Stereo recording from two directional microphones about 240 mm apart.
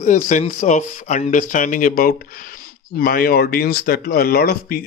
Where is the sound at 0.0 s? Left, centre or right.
Left.